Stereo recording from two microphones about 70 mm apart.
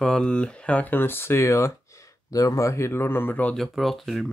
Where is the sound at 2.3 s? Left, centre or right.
Left.